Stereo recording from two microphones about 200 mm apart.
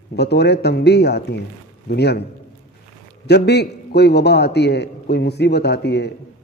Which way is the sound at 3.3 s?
55° left (ahead or behind).